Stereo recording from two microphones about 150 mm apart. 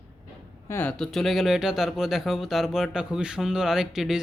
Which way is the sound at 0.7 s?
15° left (ahead or behind).